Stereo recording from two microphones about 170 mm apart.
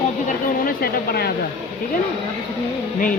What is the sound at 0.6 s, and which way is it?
Speech, 60° left (ahead or behind).